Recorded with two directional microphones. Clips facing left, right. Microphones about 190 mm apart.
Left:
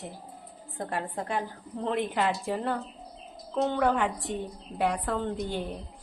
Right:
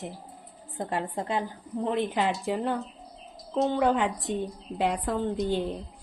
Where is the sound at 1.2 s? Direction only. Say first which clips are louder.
Right 2 dB; 20° right (ahead or behind).